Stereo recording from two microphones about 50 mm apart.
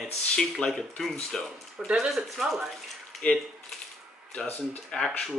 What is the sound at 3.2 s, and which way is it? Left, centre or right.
Speech, left.